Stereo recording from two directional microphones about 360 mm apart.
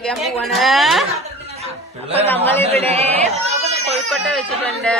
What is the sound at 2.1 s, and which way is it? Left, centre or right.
Speech, centre.